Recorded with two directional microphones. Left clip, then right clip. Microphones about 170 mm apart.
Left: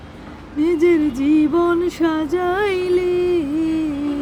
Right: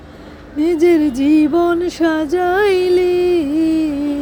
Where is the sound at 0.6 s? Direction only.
20° right (ahead or behind).